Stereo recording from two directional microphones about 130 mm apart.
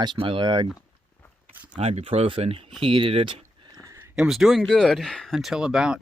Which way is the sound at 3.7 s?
25° right (ahead or behind).